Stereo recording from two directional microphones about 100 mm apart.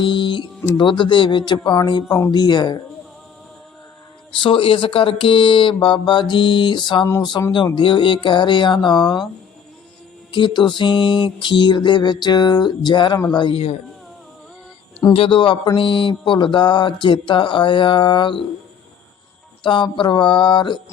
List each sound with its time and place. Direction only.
0.0 s mantra: 50° left (ahead or behind)
4.3 s a sound: 60° left (ahead or behind)
7.2 s mantra: 45° left (ahead or behind)
10.3 s mantra: 55° left (ahead or behind)
15.1 s a sound: 65° left (ahead or behind)
19.6 s mantra: 55° left (ahead or behind)